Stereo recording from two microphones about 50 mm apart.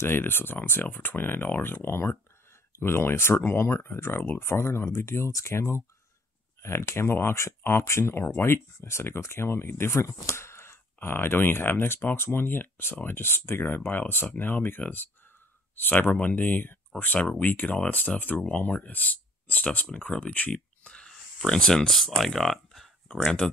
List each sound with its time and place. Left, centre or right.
0.0 s speech: left
20.5 s a sound: centre
21.5 s speech: centre